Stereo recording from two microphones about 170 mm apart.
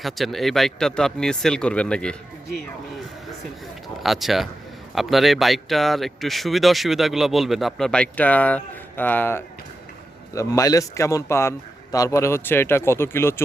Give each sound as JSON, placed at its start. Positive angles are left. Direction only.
{"t": 0.0, "sound": "speech", "side_deg": 0}
{"t": 4.0, "sound": "a man's voice", "side_deg": 0}